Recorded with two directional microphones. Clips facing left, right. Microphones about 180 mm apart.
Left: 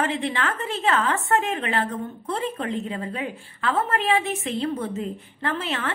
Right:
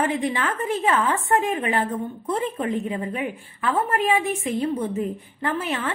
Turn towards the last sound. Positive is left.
turn(degrees=-15)  # may be behind; listen again after turning